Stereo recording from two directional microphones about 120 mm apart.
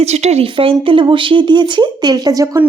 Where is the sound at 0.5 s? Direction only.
45° right (ahead or behind); by 2.6 s 30° right (ahead or behind).